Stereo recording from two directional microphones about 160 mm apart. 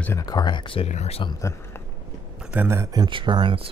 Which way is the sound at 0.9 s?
45° left (ahead or behind).